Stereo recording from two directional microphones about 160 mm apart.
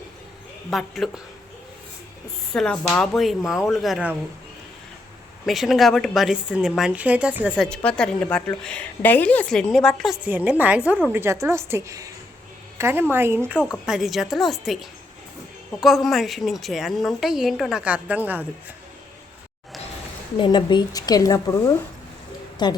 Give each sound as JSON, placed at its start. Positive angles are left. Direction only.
{"t": 0.7, "sound": "a woman's voice", "side_deg": 0}
{"t": 2.5, "sound": "a woman's voice", "side_deg": 5}
{"t": 5.5, "sound": "a woman's voice", "side_deg": 0}
{"t": 7.5, "sound": "a woman's voice", "side_deg": 10}
{"t": 10.2, "sound": "a woman's voice", "side_deg": -10}
{"t": 13.8, "sound": "a woman's voice", "side_deg": 0}
{"t": 20.3, "sound": "a woman's voice", "side_deg": 30}